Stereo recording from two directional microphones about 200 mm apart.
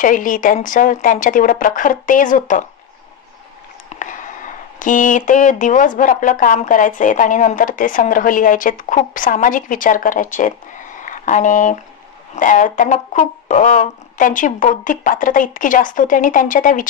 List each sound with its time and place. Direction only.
0.0 s speech: 40° left (ahead or behind)
3.9 s a sound: 40° left (ahead or behind)
4.7 s speech: 40° left (ahead or behind)